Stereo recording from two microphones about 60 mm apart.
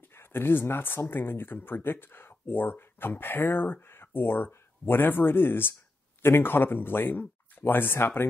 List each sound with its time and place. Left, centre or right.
0.1 s speech: left